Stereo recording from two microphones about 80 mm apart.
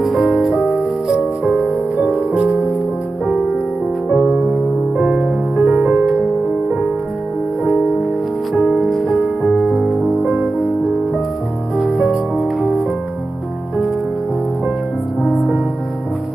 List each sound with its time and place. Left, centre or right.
0.0 s music: centre
2.0 s music: right
4.1 s music: centre
8.5 s music: centre
8.8 s music: centre
10.0 s music: right
11.7 s music: centre